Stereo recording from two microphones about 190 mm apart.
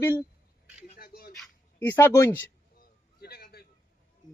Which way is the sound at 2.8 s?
55° left (ahead or behind).